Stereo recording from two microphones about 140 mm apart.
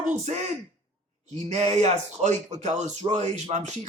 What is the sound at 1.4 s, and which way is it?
Speech, 50° right (ahead or behind).